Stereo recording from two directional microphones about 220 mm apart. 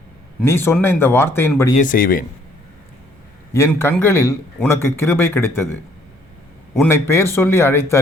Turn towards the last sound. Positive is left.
turn(degrees=10)  # may be behind; listen again after turning